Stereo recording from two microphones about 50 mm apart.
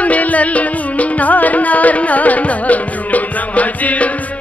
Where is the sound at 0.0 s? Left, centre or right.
Left.